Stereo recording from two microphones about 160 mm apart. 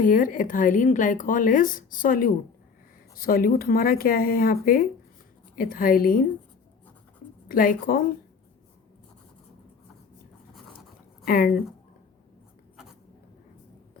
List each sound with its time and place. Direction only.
0.0 s a woman's voice: 55° left (ahead or behind)
7.4 s a woman's voice: 60° left (ahead or behind)
11.3 s a woman's voice: 60° left (ahead or behind)
12.7 s writing: 5° right (ahead or behind)